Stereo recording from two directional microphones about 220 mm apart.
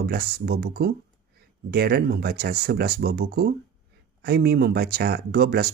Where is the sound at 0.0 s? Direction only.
45° right (ahead or behind).